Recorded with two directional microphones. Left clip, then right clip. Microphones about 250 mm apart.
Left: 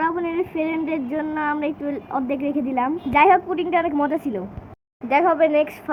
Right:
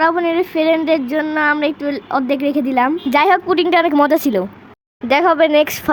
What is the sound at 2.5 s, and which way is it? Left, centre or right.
Speech, right.